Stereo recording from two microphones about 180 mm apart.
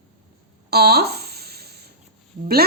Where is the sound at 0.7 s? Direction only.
60° right (ahead or behind).